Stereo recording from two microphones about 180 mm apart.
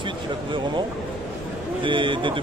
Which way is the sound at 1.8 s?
25° right (ahead or behind).